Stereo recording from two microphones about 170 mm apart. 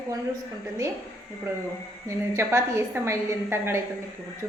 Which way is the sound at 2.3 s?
15° right (ahead or behind).